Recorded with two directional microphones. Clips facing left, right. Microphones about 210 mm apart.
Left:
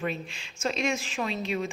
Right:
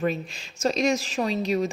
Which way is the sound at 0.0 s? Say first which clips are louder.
Right 6 dB; 40° right (ahead or behind).